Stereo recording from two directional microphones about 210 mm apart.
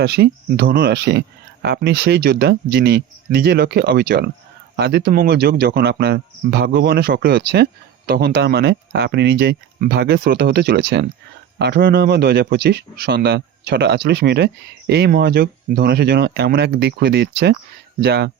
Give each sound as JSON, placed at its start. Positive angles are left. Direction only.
{"t": 0.0, "sound": "speech", "side_deg": -50}